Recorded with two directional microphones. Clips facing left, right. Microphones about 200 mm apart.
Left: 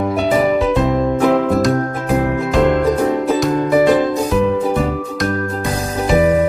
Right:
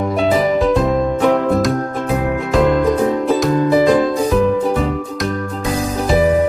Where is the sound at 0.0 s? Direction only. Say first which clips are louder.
Even; 5° left (ahead or behind).